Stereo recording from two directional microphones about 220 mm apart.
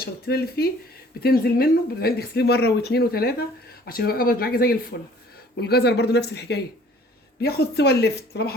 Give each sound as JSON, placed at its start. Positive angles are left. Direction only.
{"t": 0.0, "sound": "speech", "side_deg": 45}